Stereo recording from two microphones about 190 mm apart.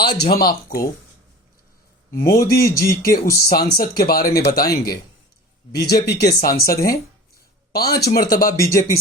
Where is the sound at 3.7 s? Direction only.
50° left (ahead or behind).